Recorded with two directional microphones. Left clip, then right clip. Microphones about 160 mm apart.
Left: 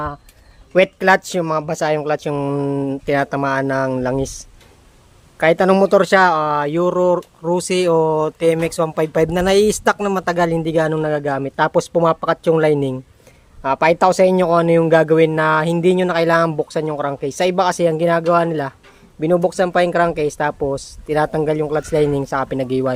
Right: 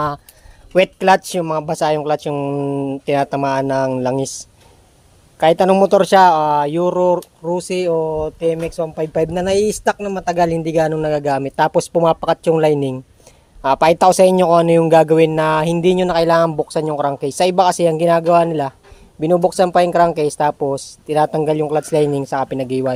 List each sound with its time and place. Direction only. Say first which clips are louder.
0.7 s speech: right 1 dB; centre (ahead or behind)
7.4 s speech: left 3 dB; 15° left (ahead or behind)
10.3 s speech: right 4 dB; 5° left (ahead or behind)